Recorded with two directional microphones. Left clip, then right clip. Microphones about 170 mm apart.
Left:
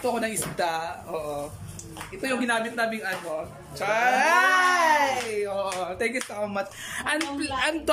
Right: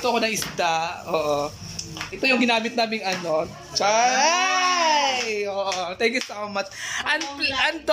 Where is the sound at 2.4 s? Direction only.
20° right (ahead or behind).